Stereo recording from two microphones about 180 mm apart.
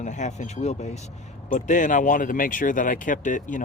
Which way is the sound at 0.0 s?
40° left (ahead or behind).